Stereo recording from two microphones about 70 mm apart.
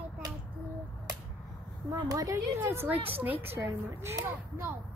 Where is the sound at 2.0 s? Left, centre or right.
Right.